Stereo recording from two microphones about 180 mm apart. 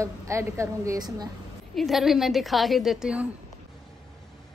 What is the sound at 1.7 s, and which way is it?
A child's voice, centre (ahead or behind).